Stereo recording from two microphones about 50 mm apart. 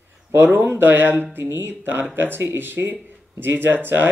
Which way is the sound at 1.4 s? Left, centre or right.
Right.